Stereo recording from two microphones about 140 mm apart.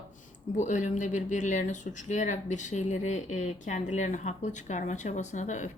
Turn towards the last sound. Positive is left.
turn(degrees=60)  # may be behind; listen again after turning